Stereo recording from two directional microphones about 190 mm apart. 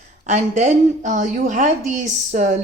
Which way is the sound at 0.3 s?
40° right (ahead or behind).